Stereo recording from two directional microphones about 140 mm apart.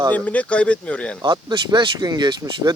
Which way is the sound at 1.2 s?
30° right (ahead or behind).